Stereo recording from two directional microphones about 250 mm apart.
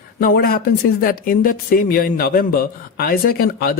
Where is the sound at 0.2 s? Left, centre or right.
Left.